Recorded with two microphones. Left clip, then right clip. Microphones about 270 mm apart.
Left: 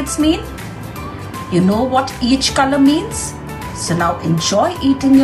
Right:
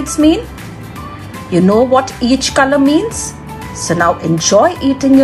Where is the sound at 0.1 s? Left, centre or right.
Centre.